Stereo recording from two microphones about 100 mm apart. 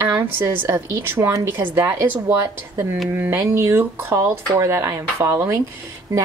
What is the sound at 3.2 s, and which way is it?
A woman's voice, 20° right (ahead or behind).